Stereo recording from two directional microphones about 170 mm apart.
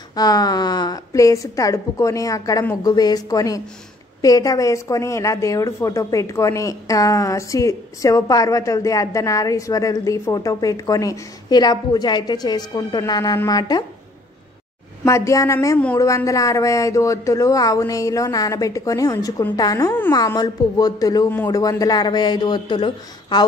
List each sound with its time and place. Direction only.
0.1 s a woman's voice: 25° left (ahead or behind)
15.0 s a woman's voice: 20° left (ahead or behind)